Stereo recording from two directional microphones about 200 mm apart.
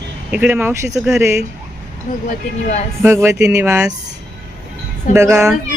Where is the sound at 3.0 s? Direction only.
10° right (ahead or behind).